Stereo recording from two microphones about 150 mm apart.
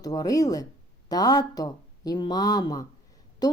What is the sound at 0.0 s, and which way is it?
A woman's voice, 25° left (ahead or behind).